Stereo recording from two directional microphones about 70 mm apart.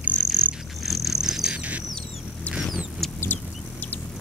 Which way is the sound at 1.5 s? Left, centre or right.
Right.